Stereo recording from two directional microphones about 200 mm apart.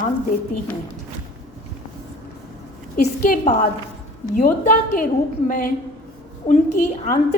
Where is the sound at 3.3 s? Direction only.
35° left (ahead or behind).